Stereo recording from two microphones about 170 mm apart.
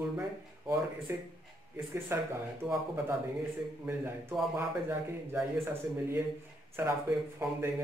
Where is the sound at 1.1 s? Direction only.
15° right (ahead or behind).